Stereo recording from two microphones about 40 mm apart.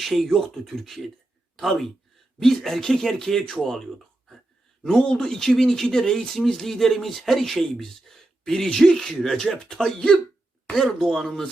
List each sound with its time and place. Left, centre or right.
0.0 s speech: centre
7.5 s speech: centre
9.5 s speech: centre